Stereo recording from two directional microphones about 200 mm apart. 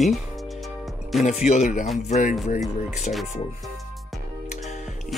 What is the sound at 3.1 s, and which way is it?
Speech, 35° left (ahead or behind).